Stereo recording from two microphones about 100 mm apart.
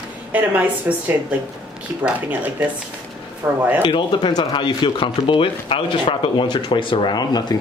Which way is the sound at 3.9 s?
50° left (ahead or behind).